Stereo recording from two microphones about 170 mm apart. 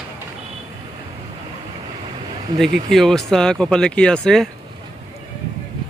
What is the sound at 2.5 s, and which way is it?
Speech, 20° right (ahead or behind).